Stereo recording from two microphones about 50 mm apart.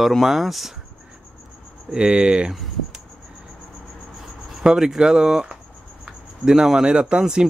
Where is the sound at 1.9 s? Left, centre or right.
Centre.